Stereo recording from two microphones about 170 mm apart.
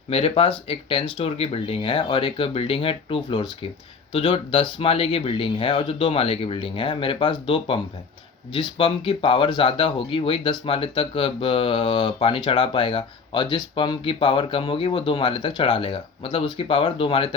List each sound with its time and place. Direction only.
0.1 s speech: 35° left (ahead or behind)